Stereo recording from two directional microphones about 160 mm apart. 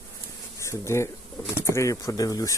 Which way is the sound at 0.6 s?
20° left (ahead or behind).